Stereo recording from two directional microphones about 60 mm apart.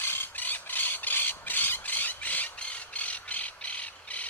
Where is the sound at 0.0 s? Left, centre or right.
Left.